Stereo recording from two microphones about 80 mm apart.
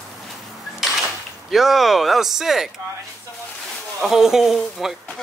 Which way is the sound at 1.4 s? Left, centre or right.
Centre.